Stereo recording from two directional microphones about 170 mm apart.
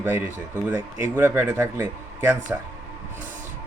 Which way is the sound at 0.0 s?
10° right (ahead or behind).